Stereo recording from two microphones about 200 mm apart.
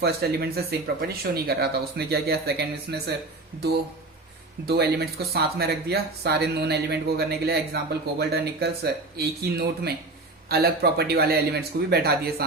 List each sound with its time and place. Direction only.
0.0 s speech: 50° right (ahead or behind)
4.6 s speech: 55° right (ahead or behind)